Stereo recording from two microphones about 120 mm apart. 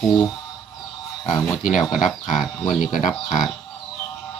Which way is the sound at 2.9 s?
90° left.